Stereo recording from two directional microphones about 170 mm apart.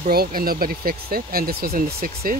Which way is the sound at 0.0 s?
60° right (ahead or behind).